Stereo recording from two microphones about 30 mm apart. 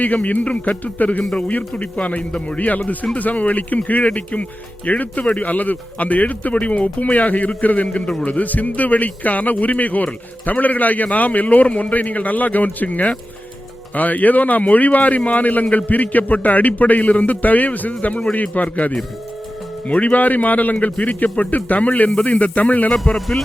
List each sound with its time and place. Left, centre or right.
0.0 s speech: left
1.7 s a man's voice: left
2.6 s speech: left
10.6 s speech: left
21.3 s speech: left